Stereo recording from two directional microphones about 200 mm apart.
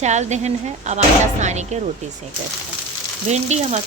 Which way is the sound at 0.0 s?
35° right (ahead or behind).